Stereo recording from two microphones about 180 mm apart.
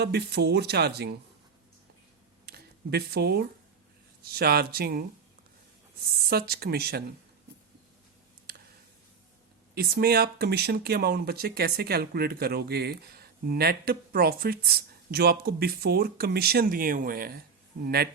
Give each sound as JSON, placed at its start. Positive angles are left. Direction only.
{"t": 0.0, "sound": "speech", "side_deg": -65}
{"t": 2.5, "sound": "a sound", "side_deg": -60}
{"t": 4.2, "sound": "speech", "side_deg": -60}
{"t": 6.2, "sound": "speech", "side_deg": -60}
{"t": 9.7, "sound": "speech", "side_deg": -60}